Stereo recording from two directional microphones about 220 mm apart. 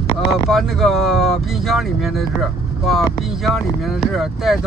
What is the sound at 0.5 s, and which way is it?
Speech, centre (ahead or behind).